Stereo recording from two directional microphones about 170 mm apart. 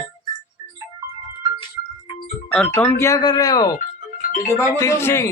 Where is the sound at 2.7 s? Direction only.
15° left (ahead or behind).